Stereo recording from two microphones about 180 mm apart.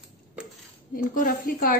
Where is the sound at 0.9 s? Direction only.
50° left (ahead or behind).